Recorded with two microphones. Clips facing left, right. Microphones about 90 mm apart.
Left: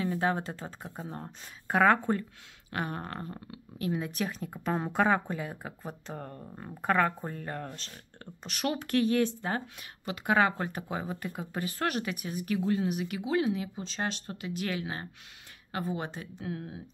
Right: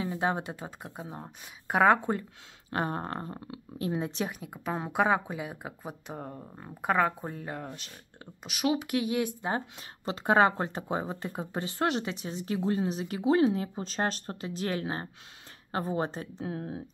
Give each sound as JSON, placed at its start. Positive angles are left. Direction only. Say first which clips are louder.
{"t": 0.0, "sound": "speech", "louder": "left 1 dB", "side_deg": -20}
{"t": 2.7, "sound": "speech", "louder": "right 4 dB", "side_deg": -30}
{"t": 4.3, "sound": "speech", "louder": "left 2 dB", "side_deg": -5}
{"t": 9.5, "sound": "speech", "louder": "right 2 dB", "side_deg": -30}